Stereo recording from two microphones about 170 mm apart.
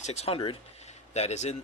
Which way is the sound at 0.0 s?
40° left (ahead or behind).